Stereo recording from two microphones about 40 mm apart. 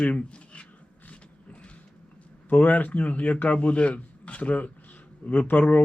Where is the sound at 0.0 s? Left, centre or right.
Left.